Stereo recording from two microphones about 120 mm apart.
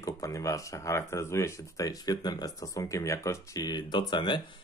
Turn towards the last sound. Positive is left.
turn(degrees=40)  # may be behind; listen again after turning